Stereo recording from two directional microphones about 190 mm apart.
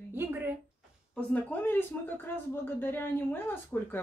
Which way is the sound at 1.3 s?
10° left (ahead or behind).